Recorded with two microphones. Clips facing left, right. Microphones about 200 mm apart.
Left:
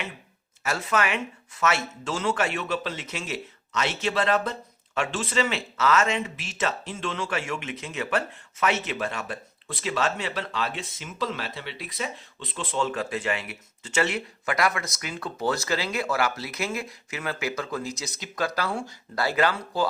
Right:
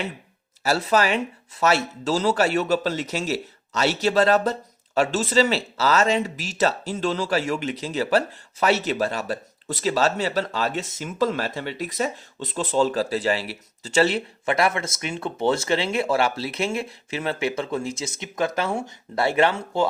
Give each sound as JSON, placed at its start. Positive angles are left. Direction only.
{"t": 0.6, "sound": "speech", "side_deg": -35}